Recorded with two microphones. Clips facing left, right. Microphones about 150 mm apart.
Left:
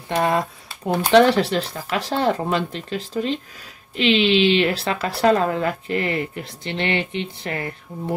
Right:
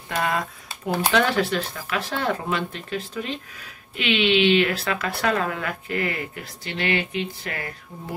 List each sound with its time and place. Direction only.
0.1 s speech: 25° left (ahead or behind)